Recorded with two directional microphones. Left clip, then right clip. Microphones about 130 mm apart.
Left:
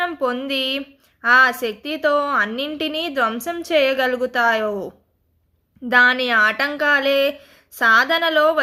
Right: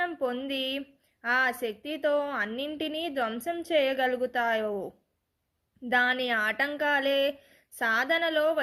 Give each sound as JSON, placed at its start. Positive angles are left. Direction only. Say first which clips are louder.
{"t": 0.0, "sound": "a woman's voice", "louder": "left 8 dB", "side_deg": -20}
{"t": 5.9, "sound": "a woman's voice", "louder": "left 11 dB", "side_deg": -25}